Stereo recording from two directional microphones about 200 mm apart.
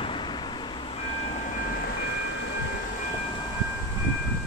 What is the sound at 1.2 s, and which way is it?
Train, 35° left (ahead or behind).